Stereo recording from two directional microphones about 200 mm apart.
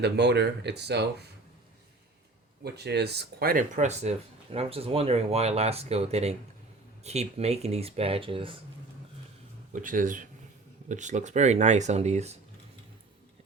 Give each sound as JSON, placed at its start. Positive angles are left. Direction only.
{"t": 0.0, "sound": "speech", "side_deg": -55}
{"t": 2.6, "sound": "speech", "side_deg": -55}
{"t": 9.7, "sound": "speech", "side_deg": -40}